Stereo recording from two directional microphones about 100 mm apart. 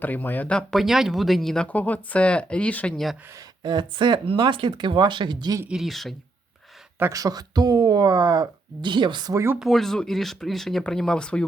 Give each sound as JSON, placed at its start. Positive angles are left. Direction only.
{"t": 0.0, "sound": "speech", "side_deg": 15}
{"t": 0.8, "sound": "speech", "side_deg": -5}
{"t": 1.6, "sound": "speech", "side_deg": 15}
{"t": 3.6, "sound": "speech", "side_deg": -50}
{"t": 5.6, "sound": "speech", "side_deg": -5}
{"t": 7.1, "sound": "speech", "side_deg": -35}
{"t": 9.3, "sound": "speech", "side_deg": -25}
{"t": 9.6, "sound": "speech", "side_deg": 0}